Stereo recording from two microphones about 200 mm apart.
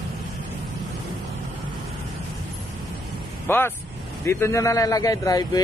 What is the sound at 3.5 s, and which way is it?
A man's voice, 10° left (ahead or behind).